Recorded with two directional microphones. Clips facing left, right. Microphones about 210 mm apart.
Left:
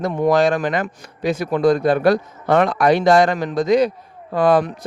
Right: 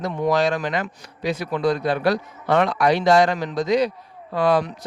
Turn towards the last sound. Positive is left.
turn(degrees=50)  # may be behind; listen again after turning